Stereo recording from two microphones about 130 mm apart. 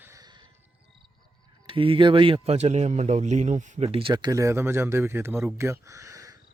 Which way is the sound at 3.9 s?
40° right (ahead or behind).